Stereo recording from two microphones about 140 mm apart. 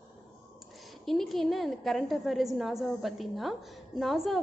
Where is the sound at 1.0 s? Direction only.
Centre (ahead or behind).